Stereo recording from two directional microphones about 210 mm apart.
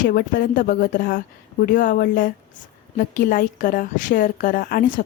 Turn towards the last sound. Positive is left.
turn(degrees=40)  # may be behind; listen again after turning